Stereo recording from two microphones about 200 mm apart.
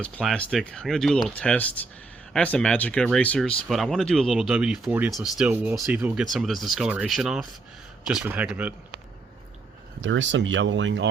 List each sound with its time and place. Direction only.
0.0 s speech: 5° left (ahead or behind)
10.0 s speech: 65° right (ahead or behind)